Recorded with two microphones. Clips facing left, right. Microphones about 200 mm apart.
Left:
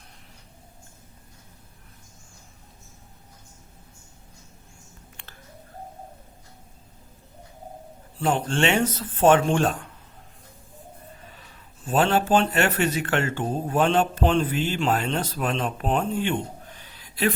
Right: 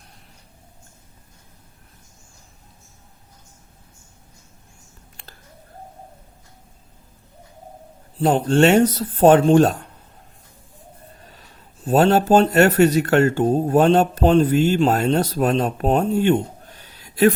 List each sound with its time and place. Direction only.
8.2 s speech: 40° right (ahead or behind)
11.3 s speech: 40° right (ahead or behind)